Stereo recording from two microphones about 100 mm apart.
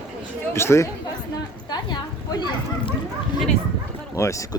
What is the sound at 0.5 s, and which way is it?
Speech, 25° left (ahead or behind).